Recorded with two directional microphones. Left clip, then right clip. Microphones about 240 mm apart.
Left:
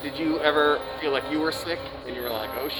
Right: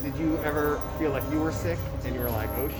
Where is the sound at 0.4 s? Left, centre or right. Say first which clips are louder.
Left 6 dB; left.